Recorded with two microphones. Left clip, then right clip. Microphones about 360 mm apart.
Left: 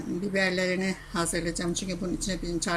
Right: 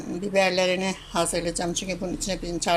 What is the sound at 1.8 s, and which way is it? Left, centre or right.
Speech, right.